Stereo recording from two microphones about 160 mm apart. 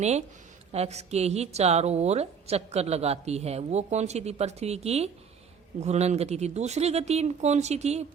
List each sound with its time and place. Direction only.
0.0 s a woman's voice: 45° right (ahead or behind)